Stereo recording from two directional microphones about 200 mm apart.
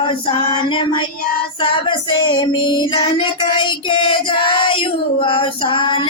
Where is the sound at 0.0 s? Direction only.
25° left (ahead or behind).